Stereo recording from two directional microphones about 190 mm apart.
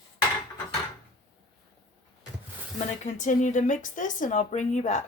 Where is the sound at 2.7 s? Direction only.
40° left (ahead or behind).